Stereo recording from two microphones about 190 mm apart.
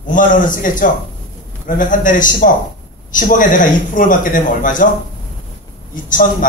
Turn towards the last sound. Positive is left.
turn(degrees=45)  # may be behind; listen again after turning